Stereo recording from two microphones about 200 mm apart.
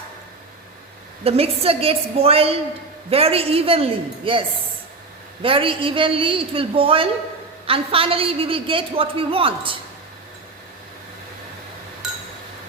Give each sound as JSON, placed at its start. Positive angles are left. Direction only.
{"t": 1.2, "sound": "a woman's voice", "side_deg": -30}